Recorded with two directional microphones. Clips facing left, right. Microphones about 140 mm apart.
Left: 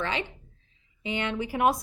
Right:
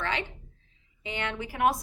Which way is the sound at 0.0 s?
20° left (ahead or behind).